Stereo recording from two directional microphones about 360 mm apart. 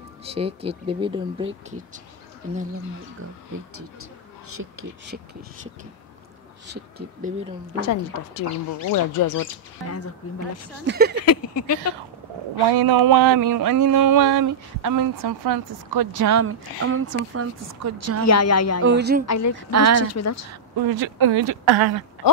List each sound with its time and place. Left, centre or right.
0.2 s speech: centre
3.7 s speech: right
6.7 s speech: right
7.8 s speech: left
10.9 s speech: right
11.5 s speech: left
12.7 s a sound: right
18.2 s speech: left
18.9 s speech: right
19.2 s speech: left
19.7 s speech: right
20.0 s speech: left
20.7 s speech: right